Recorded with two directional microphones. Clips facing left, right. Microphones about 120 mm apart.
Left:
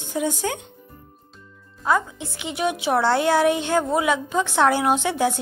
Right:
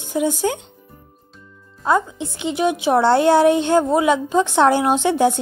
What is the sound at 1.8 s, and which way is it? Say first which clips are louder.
A woman's voice: right 3 dB; 25° right (ahead or behind).